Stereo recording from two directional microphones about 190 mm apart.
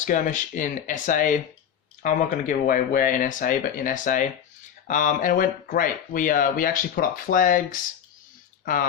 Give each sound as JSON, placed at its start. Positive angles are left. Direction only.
{"t": 0.0, "sound": "speech", "side_deg": 40}